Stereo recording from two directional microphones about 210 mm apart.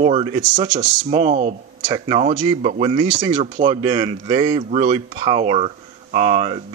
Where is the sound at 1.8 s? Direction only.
25° right (ahead or behind).